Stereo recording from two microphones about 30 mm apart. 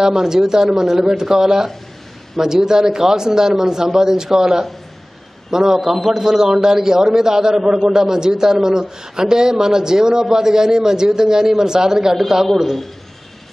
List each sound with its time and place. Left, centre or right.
0.0 s a man's voice: centre